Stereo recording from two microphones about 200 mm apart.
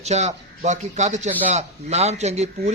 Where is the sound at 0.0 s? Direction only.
35° right (ahead or behind).